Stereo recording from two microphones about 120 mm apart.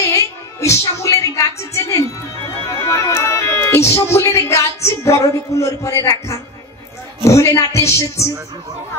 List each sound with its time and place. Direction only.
0.1 s music: 25° left (ahead or behind)
7.2 s speech: 25° left (ahead or behind)